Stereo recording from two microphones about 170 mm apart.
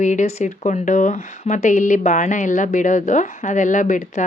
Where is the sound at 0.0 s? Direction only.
45° left (ahead or behind).